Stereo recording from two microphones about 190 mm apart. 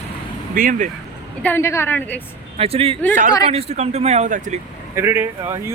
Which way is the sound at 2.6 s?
30° right (ahead or behind).